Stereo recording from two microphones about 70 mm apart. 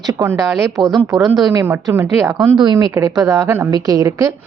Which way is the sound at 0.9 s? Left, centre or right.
Right.